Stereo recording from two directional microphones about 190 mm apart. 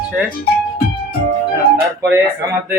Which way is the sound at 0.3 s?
50° left (ahead or behind).